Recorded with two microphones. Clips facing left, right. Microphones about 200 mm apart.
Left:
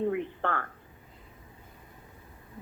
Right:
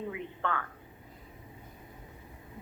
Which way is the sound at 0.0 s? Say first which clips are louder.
Left 7 dB; 50° left (ahead or behind).